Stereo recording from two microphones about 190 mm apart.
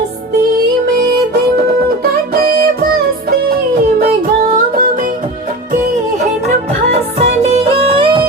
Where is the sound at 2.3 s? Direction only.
50° right (ahead or behind).